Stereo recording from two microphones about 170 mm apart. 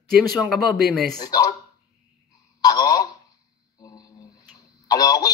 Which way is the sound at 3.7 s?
20° left (ahead or behind).